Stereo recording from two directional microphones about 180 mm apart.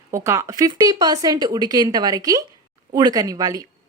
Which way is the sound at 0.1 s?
15° right (ahead or behind).